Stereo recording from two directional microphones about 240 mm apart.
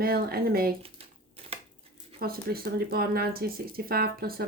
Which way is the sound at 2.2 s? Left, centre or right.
Right.